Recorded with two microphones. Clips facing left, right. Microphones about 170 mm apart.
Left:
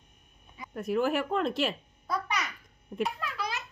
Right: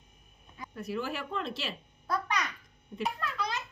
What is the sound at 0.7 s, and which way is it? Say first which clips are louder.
Speech: left 8 dB; 50° left (ahead or behind).